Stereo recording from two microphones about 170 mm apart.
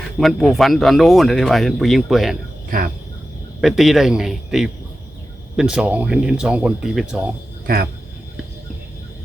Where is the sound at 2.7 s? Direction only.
60° right (ahead or behind).